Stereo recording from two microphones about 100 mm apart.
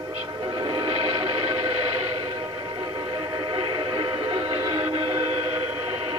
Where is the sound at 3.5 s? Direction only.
55° right (ahead or behind).